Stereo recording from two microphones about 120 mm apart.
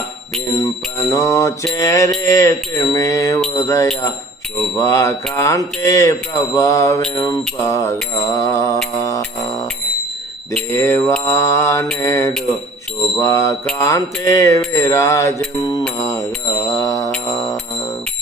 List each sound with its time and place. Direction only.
0.5 s bicycle bell: 25° left (ahead or behind)
1.7 s mantra: 25° left (ahead or behind)
9.0 s music: 25° left (ahead or behind)
10.7 s mantra: 20° left (ahead or behind)
17.2 s music: 30° left (ahead or behind)